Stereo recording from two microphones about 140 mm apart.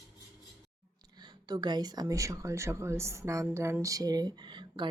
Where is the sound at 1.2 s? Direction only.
30° right (ahead or behind).